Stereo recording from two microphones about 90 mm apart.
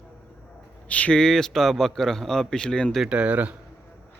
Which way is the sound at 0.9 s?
15° left (ahead or behind).